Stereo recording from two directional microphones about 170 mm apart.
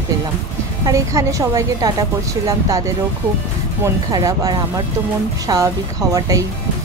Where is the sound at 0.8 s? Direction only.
20° right (ahead or behind).